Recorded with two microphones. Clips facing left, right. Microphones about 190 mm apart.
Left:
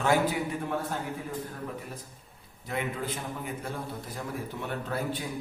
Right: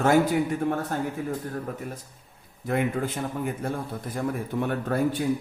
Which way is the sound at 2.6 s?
50° right (ahead or behind).